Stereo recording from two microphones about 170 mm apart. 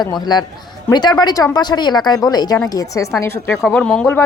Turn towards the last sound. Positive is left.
turn(degrees=5)  # may be behind; listen again after turning